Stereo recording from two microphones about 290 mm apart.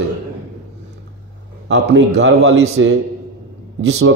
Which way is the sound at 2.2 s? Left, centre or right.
Right.